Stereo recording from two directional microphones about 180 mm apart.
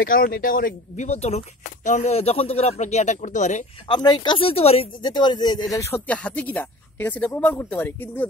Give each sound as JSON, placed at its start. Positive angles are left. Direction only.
{"t": 0.0, "sound": "speech", "side_deg": 55}
{"t": 3.8, "sound": "speech", "side_deg": 25}